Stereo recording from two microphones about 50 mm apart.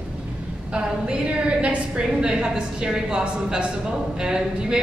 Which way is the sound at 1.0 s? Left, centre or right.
Right.